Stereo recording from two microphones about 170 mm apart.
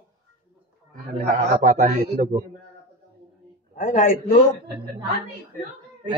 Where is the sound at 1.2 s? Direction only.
50° right (ahead or behind).